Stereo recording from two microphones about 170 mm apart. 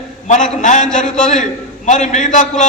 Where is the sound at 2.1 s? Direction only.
50° left (ahead or behind).